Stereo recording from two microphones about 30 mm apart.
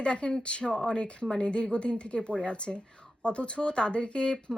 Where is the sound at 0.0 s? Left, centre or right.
Left.